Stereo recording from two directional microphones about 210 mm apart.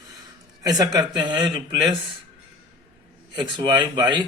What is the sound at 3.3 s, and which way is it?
Speech, 20° right (ahead or behind).